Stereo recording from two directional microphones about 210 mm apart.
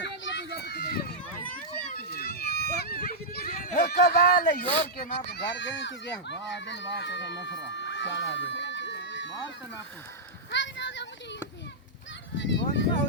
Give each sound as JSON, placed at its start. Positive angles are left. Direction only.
{"t": 0.3, "sound": "run", "side_deg": 55}
{"t": 4.9, "sound": "speech", "side_deg": 50}
{"t": 7.7, "sound": "a sound", "side_deg": 60}
{"t": 10.5, "sound": "children playing", "side_deg": 60}
{"t": 12.4, "sound": "a sound", "side_deg": 60}
{"t": 12.7, "sound": "speech", "side_deg": 55}